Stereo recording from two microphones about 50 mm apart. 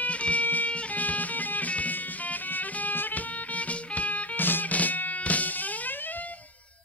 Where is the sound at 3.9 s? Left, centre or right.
Left.